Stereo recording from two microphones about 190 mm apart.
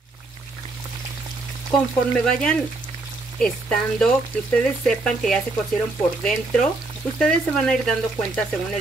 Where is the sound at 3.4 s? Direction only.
5° left (ahead or behind).